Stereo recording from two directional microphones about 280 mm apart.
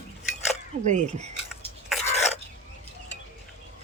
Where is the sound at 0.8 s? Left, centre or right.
Right.